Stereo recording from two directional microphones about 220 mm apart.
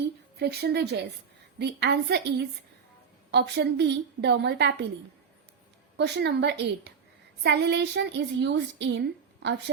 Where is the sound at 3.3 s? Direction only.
50° right (ahead or behind).